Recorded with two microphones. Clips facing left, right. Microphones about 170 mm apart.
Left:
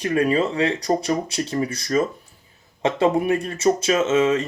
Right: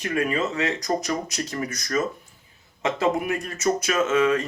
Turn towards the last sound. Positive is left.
turn(degrees=25)  # may be behind; listen again after turning